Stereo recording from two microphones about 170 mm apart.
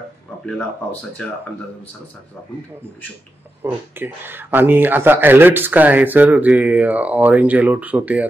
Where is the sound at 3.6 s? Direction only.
10° right (ahead or behind).